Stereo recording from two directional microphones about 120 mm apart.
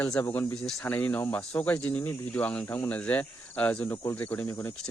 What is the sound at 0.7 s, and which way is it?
Speech, 5° left (ahead or behind).